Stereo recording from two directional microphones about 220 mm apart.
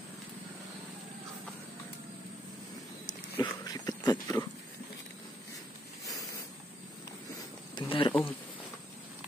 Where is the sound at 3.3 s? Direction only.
15° left (ahead or behind).